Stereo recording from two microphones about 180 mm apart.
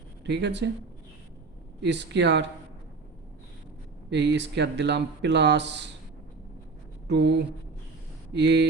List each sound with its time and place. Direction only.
0.3 s speech: 75° right (ahead or behind)
1.8 s speech: 75° right (ahead or behind)
4.1 s speech: 75° right (ahead or behind)
7.1 s speech: 70° right (ahead or behind)